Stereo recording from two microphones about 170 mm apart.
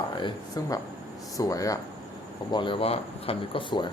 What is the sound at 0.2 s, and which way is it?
Speech, 20° left (ahead or behind).